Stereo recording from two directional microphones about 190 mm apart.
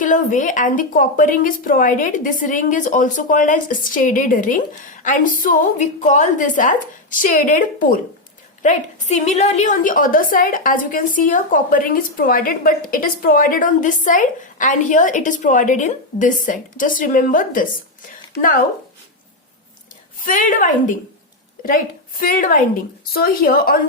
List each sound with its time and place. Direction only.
0.0 s a woman's voice: 45° left (ahead or behind)
20.1 s a woman's voice: 45° left (ahead or behind)